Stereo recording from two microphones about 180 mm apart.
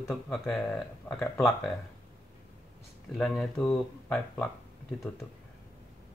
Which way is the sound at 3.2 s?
5° left (ahead or behind).